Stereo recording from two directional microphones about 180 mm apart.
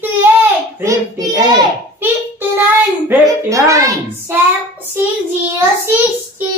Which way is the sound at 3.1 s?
15° right (ahead or behind).